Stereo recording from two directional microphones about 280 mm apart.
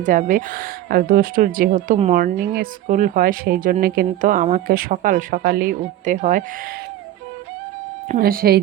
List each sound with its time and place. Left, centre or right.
0.0 s speech: right
8.0 s speech: right